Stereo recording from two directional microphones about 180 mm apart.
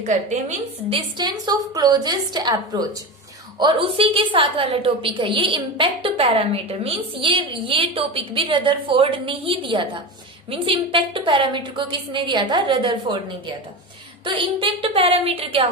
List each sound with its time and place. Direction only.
0.0 s a woman's voice: 40° right (ahead or behind); by 13.1 s 25° right (ahead or behind)
14.3 s a woman's voice: 30° right (ahead or behind)